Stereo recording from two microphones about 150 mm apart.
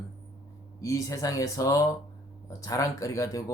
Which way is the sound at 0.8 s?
20° left (ahead or behind).